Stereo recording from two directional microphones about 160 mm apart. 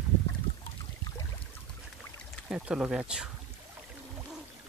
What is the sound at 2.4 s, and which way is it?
Speech, 5° right (ahead or behind).